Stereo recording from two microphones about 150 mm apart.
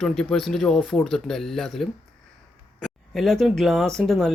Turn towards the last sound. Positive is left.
turn(degrees=0)  # may be behind; listen again after turning